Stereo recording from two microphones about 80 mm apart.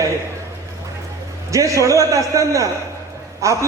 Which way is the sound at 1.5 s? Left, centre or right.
Right.